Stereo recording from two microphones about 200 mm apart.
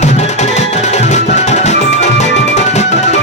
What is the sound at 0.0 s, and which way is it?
Music, 35° left (ahead or behind).